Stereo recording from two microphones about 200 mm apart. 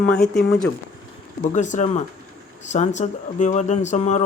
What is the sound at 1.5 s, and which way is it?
Speech, 40° left (ahead or behind).